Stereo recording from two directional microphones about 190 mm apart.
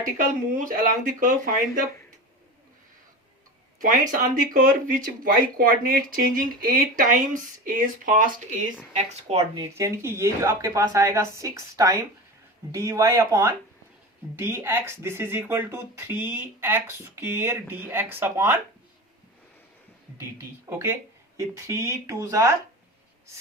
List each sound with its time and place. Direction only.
0.5 s speech: 45° right (ahead or behind)
3.8 s speech: 45° right (ahead or behind)
9.6 s speech: 15° right (ahead or behind)
20.7 s speech: 15° right (ahead or behind)